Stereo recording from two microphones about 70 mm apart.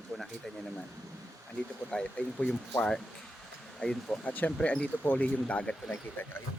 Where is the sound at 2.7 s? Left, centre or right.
Centre.